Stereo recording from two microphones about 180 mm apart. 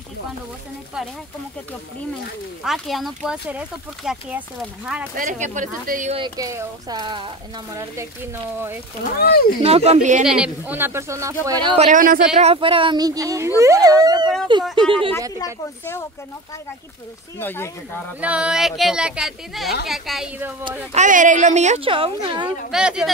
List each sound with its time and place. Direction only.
2.6 s speech: centre (ahead or behind)
5.1 s speech: 45° right (ahead or behind)
6.1 s speech: 25° right (ahead or behind)
9.2 s speech: 60° left (ahead or behind)
9.6 s speech: 35° right (ahead or behind)
10.2 s speech: 5° right (ahead or behind); by 11.8 s 25° right (ahead or behind)
11.8 s speech: 50° right (ahead or behind)
12.4 s speech: 30° right (ahead or behind)
15.3 s speech: 15° left (ahead or behind)
17.4 s speech: 10° left (ahead or behind)
18.2 s speech: 5° right (ahead or behind)
20.9 s speech: 45° right (ahead or behind); by 22.5 s 25° right (ahead or behind)
22.7 s speech: 5° right (ahead or behind)